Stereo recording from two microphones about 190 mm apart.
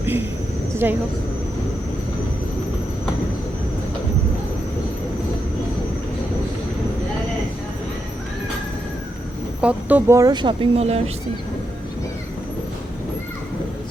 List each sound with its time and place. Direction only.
0.0 s a sound: 10° right (ahead or behind)
0.8 s speech: 10° right (ahead or behind)
9.6 s speech: 10° right (ahead or behind); by 11.1 s 30° right (ahead or behind)